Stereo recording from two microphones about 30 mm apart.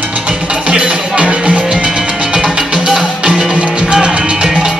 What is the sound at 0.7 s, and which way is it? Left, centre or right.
Music, right.